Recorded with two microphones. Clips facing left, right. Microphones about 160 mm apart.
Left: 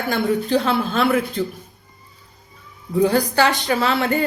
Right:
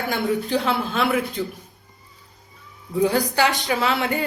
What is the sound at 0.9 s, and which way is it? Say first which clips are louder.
Speech: left 4 dB; 50° left (ahead or behind).